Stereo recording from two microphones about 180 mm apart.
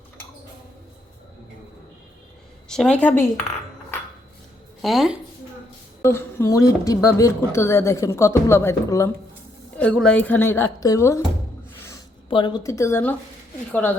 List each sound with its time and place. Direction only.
2.6 s a woman's voice: 5° left (ahead or behind)
4.8 s a woman's voice: centre (ahead or behind)
6.0 s speech: 15° left (ahead or behind)
12.3 s speech: 25° left (ahead or behind)